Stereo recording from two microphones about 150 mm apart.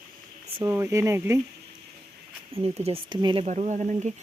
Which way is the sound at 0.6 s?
15° right (ahead or behind).